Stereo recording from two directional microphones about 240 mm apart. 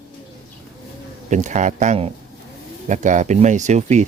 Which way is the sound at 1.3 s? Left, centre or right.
Right.